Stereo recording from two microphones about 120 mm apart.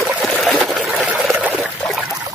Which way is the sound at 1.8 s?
Centre (ahead or behind).